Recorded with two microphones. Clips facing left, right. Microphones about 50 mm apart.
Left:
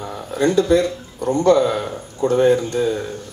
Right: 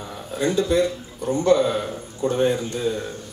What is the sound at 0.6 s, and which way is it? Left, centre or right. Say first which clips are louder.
Speech: left 3 dB; left.